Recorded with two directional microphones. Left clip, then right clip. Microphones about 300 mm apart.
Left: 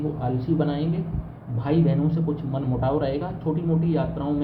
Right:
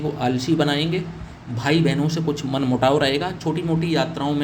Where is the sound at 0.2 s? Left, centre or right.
Right.